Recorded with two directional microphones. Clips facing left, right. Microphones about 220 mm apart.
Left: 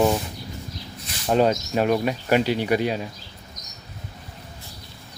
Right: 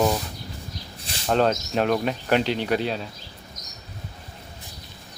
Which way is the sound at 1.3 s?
10° left (ahead or behind).